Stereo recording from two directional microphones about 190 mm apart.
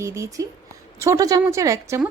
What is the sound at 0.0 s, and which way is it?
A woman's voice, 15° right (ahead or behind).